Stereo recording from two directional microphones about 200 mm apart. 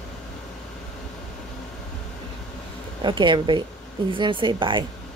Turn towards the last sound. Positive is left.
turn(degrees=-25)  # may be behind; listen again after turning